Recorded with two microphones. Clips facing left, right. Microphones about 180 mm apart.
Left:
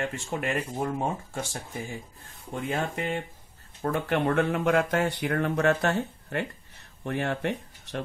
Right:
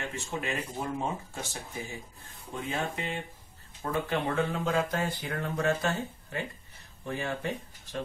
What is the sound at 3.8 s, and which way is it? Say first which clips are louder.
A man's voice: left 4 dB; 65° left (ahead or behind).